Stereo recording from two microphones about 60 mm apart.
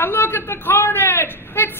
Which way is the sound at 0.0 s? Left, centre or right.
Left.